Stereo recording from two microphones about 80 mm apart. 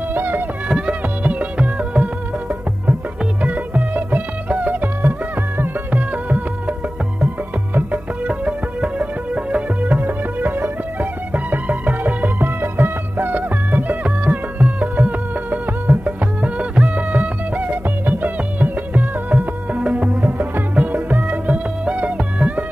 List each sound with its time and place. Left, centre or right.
0.1 s music: right
0.7 s music: centre
3.4 s music: right
7.7 s music: centre